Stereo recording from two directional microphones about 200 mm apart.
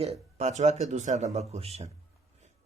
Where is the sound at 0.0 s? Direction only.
30° right (ahead or behind).